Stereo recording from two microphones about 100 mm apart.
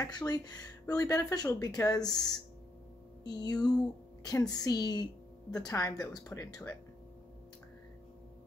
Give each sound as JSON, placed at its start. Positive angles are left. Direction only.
{"t": 0.0, "sound": "a woman's voice", "side_deg": 40}
{"t": 3.3, "sound": "a woman's voice", "side_deg": 40}